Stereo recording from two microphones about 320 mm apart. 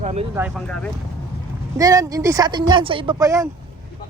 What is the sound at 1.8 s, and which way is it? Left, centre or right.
Speech, centre.